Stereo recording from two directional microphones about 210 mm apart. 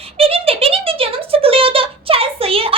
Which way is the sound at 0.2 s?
25° right (ahead or behind).